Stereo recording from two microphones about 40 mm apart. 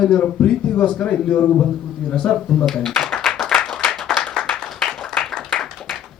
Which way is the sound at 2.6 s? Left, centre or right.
Centre.